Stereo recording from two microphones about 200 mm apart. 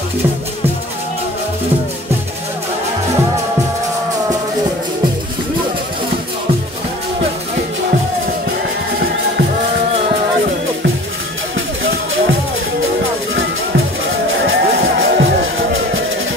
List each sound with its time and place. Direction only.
14.4 s music: 80° right